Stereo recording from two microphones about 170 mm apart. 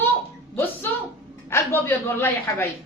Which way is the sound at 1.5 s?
15° left (ahead or behind).